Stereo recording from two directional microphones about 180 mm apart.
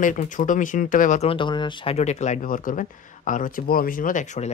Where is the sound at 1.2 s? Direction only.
25° left (ahead or behind).